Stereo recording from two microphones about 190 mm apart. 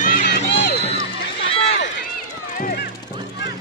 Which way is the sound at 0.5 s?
60° left (ahead or behind).